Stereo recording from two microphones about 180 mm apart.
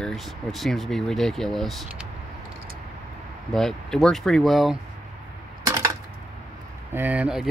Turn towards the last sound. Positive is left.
turn(degrees=-5)  # may be behind; listen again after turning